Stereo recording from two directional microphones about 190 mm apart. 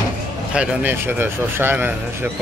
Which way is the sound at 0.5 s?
10° right (ahead or behind).